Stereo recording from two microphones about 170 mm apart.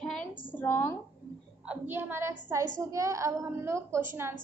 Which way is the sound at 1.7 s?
10° right (ahead or behind).